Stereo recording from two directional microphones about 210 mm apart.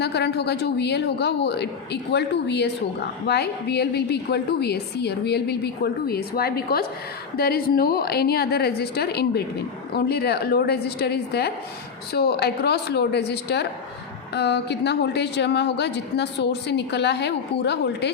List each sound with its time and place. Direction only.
0.0 s a woman's voice: 50° left (ahead or behind)